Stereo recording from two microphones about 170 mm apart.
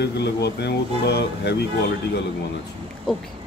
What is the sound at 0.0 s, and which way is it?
Speech, 80° left.